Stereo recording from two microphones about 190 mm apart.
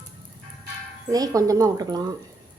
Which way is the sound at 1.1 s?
20° right (ahead or behind).